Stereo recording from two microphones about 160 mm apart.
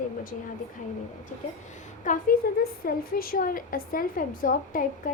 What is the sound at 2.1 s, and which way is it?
Speech, 55° left (ahead or behind).